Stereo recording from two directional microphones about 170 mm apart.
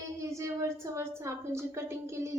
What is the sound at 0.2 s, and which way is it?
A woman's voice, 15° right (ahead or behind).